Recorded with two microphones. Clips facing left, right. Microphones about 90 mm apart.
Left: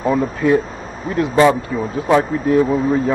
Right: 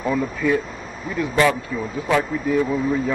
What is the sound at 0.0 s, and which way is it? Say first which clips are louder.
Speech: left 5 dB; 30° left (ahead or behind).